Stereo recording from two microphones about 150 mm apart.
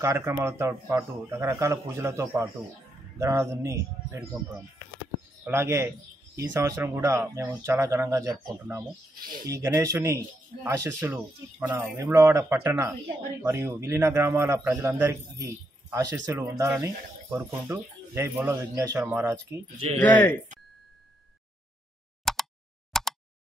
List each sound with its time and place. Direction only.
0.0 s speech: 15° right (ahead or behind)
5.5 s speech: 15° right (ahead or behind)
20.0 s speech: 10° left (ahead or behind)
22.2 s a sound: centre (ahead or behind)